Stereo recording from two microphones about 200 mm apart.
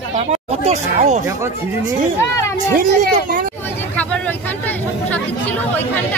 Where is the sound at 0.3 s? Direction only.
35° right (ahead or behind).